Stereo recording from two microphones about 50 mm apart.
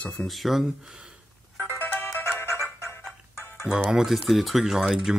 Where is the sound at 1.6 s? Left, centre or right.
Left.